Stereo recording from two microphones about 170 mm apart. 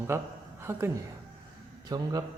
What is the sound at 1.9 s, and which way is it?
Speech, 20° right (ahead or behind).